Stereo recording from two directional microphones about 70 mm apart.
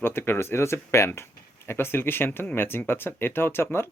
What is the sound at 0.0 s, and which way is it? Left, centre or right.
Speech, left.